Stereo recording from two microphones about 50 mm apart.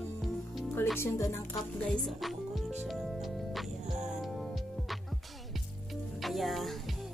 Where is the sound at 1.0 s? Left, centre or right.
Left.